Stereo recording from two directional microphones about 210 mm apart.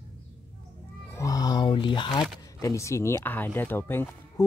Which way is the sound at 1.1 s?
15° left (ahead or behind).